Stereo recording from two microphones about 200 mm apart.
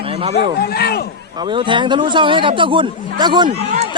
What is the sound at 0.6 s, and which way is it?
Speech, 50° left (ahead or behind).